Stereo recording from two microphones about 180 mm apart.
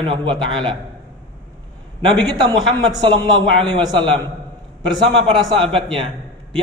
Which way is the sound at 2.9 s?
25° right (ahead or behind).